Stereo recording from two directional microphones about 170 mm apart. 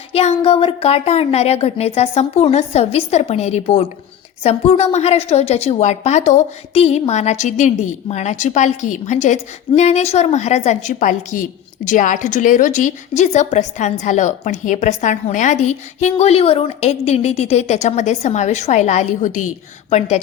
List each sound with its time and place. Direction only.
0.1 s a woman's voice: 35° left (ahead or behind)